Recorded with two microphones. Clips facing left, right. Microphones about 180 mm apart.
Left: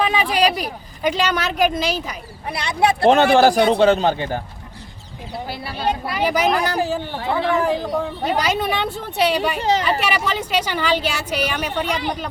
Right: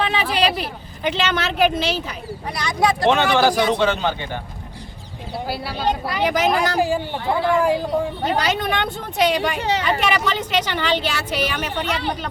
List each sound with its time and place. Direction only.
0.0 s speech: 10° left (ahead or behind)
2.5 s speech: 25° left (ahead or behind)
3.1 s a man's voice: 40° left (ahead or behind)
5.5 s speech: 5° left (ahead or behind)
6.5 s speech: 15° right (ahead or behind)
8.2 s speech: 10° left (ahead or behind)